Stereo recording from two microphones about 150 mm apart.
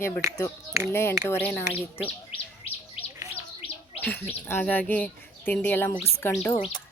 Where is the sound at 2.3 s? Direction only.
40° left (ahead or behind).